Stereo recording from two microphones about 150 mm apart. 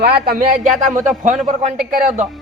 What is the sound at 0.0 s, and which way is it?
A man's voice, 90° right.